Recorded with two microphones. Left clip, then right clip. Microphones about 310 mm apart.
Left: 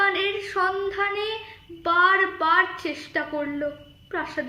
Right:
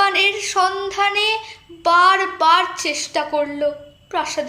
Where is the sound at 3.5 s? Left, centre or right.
Right.